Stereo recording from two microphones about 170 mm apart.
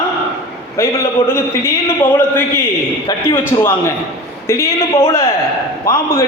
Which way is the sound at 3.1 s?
20° left (ahead or behind).